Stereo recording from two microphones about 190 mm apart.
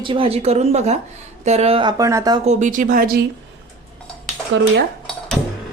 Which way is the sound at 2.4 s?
40° right (ahead or behind).